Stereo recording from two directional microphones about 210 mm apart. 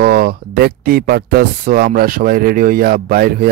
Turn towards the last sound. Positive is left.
turn(degrees=-45)  # may be behind; listen again after turning